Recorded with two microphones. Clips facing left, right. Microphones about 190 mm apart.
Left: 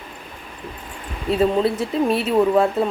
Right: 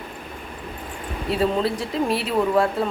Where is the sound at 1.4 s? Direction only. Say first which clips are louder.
Left 4 dB; 25° left (ahead or behind).